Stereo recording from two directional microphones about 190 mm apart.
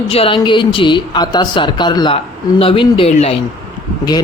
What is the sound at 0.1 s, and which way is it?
A man's voice, 30° left (ahead or behind).